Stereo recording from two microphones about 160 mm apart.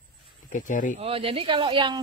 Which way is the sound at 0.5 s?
55° left (ahead or behind).